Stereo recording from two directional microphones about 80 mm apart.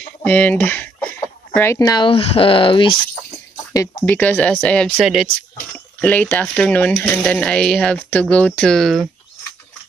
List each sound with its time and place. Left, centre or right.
0.2 s a sound: centre
1.8 s speech: left
4.0 s speech: left
5.0 s speech: centre
5.9 s speech: centre